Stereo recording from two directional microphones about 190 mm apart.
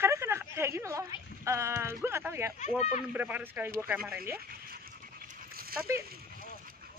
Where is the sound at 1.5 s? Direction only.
15° right (ahead or behind).